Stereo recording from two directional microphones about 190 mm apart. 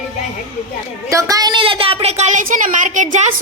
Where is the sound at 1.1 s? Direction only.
15° right (ahead or behind).